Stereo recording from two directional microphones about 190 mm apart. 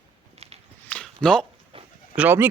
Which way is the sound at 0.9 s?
5° left (ahead or behind).